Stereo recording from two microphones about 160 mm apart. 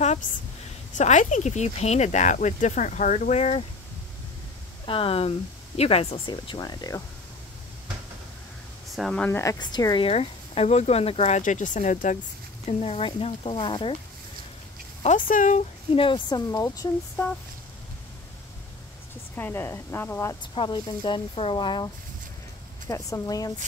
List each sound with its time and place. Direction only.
0.0 s a sound: 45° left (ahead or behind)
0.9 s speech: 50° left (ahead or behind)
4.8 s speech: 35° left (ahead or behind)
8.9 s a woman's voice: 5° left (ahead or behind)
9.4 s speech: 25° left (ahead or behind); by 12.2 s 50° left (ahead or behind)
12.6 s speech: 40° left (ahead or behind)
15.0 s speech: 55° left (ahead or behind)
15.9 s speech: 35° left (ahead or behind)
19.3 s a woman's voice: 15° left (ahead or behind)
20.5 s speech: 30° left (ahead or behind)